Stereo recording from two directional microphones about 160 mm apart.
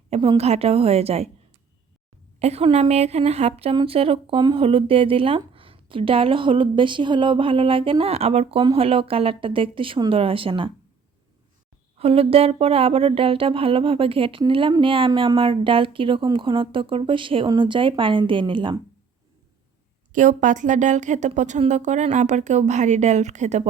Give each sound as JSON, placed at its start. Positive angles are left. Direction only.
{"t": 0.1, "sound": "speech", "side_deg": -40}
{"t": 2.4, "sound": "speech", "side_deg": -40}
{"t": 11.9, "sound": "speech", "side_deg": -40}
{"t": 20.1, "sound": "a woman's voice", "side_deg": -50}